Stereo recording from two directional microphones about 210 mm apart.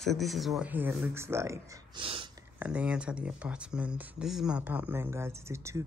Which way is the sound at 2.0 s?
25° right (ahead or behind).